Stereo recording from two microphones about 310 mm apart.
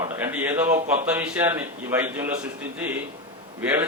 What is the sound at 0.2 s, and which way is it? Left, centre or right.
A man's voice, centre.